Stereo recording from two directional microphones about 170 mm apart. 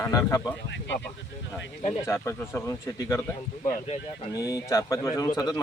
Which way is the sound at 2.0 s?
15° left (ahead or behind).